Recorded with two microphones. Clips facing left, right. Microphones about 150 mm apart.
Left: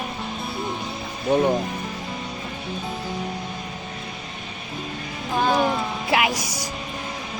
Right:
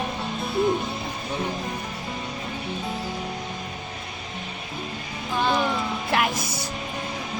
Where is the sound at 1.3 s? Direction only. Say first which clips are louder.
Left 11 dB; 60° left (ahead or behind).